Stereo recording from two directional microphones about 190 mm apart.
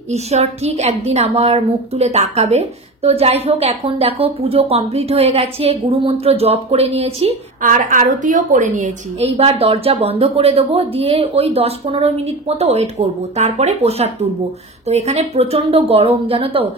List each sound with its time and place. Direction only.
0.1 s a woman's voice: 35° right (ahead or behind)
7.6 s a woman's voice: 45° right (ahead or behind); by 16.6 s 30° right (ahead or behind)